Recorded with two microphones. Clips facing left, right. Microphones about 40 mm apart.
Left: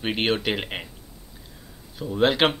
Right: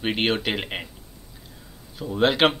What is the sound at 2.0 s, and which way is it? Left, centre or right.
Speech, centre.